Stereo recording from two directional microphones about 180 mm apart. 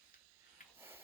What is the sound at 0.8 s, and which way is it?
Sniff, 10° right (ahead or behind).